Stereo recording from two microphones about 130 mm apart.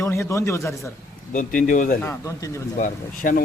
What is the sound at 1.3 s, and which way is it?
Speech, 90° left.